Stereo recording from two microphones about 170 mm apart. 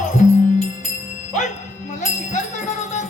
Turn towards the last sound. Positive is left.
turn(degrees=45)  # may be behind; listen again after turning